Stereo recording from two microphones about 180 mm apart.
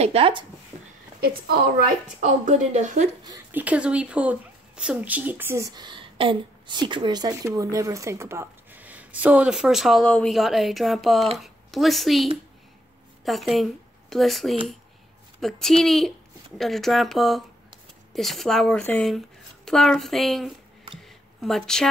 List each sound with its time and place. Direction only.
0.0 s speech: 30° right (ahead or behind)
2.1 s speech: 45° right (ahead or behind)
3.3 s a woman's voice: 10° right (ahead or behind)